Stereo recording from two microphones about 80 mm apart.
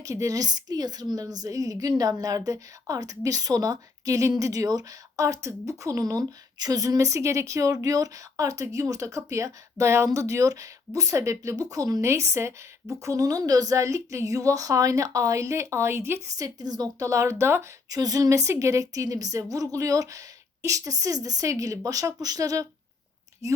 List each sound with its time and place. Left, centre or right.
0.0 s a woman's voice: right
12.0 s a woman's voice: right
16.4 s a woman's voice: right
17.8 s a woman's voice: right